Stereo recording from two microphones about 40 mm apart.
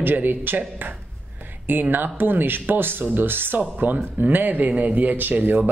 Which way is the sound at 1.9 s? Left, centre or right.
Right.